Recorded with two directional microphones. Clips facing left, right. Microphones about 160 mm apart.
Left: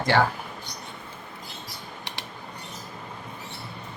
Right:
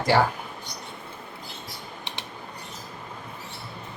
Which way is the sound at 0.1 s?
10° right (ahead or behind).